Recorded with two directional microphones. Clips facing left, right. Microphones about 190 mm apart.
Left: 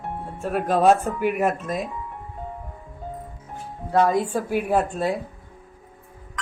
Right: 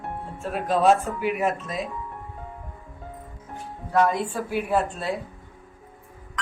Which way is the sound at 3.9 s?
35° left (ahead or behind).